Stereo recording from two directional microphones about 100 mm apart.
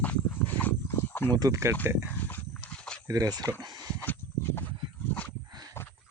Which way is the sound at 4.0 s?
20° left (ahead or behind).